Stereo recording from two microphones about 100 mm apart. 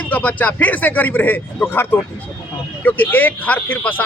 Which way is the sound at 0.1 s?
15° left (ahead or behind).